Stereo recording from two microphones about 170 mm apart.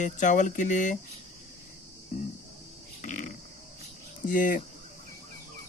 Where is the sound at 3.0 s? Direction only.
50° left (ahead or behind).